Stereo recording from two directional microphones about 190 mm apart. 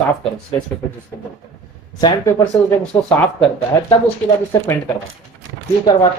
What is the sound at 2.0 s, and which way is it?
Speech, 15° left (ahead or behind).